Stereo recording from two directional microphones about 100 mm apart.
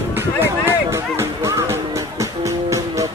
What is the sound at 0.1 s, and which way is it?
Music, 25° right (ahead or behind).